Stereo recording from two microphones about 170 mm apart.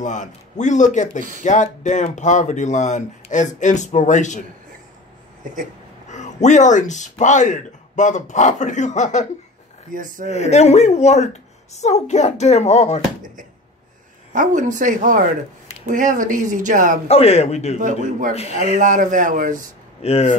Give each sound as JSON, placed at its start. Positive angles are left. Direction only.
{"t": 0.0, "sound": "speech", "side_deg": 45}
{"t": 6.0, "sound": "speech", "side_deg": 45}
{"t": 9.8, "sound": "speech", "side_deg": -50}
{"t": 10.3, "sound": "speech", "side_deg": 40}
{"t": 14.3, "sound": "speech", "side_deg": -50}
{"t": 17.1, "sound": "speech", "side_deg": 35}
{"t": 17.7, "sound": "speech", "side_deg": -50}
{"t": 18.3, "sound": "speech", "side_deg": 35}
{"t": 18.6, "sound": "speech", "side_deg": -50}
{"t": 20.0, "sound": "speech", "side_deg": 35}